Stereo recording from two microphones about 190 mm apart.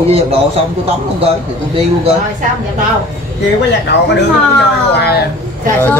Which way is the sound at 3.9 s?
60° left (ahead or behind).